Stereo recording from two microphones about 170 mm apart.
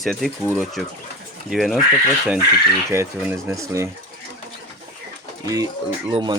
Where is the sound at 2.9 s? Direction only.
15° right (ahead or behind).